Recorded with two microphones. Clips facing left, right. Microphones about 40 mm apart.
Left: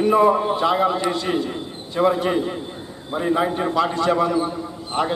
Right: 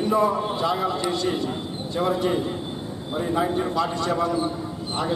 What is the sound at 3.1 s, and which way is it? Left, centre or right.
A man's voice, left.